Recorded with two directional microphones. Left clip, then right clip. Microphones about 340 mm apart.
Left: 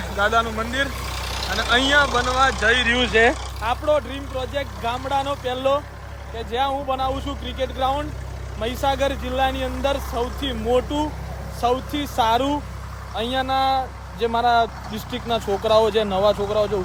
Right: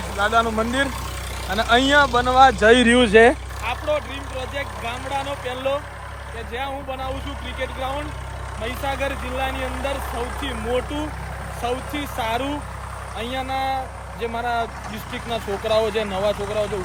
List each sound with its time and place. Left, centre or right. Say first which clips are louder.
0.2 s speech: right 1 dB; centre
3.6 s speech: left 3 dB; centre
16.2 s speech: left 3 dB; left